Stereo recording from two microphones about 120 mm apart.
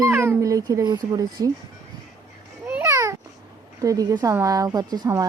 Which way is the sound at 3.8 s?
30° right (ahead or behind).